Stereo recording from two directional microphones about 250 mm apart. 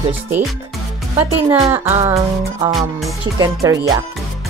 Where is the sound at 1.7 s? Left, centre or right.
Centre.